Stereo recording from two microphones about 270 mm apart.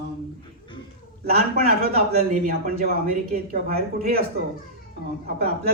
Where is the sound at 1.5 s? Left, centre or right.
Right.